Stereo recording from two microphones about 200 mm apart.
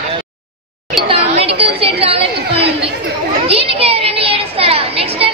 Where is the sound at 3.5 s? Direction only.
30° right (ahead or behind).